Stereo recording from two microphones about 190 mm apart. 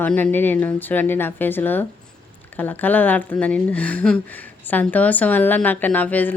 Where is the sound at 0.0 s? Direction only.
10° left (ahead or behind).